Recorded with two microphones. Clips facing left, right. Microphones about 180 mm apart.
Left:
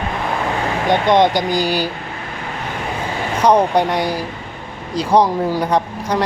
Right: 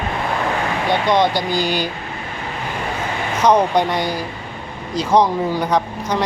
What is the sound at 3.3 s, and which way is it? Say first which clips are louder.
Speech: left 1 dB; 30° left (ahead or behind).